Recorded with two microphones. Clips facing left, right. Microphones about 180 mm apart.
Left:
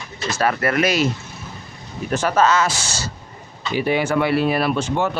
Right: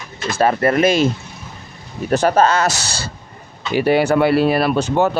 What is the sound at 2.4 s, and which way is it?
Speech, 60° right (ahead or behind).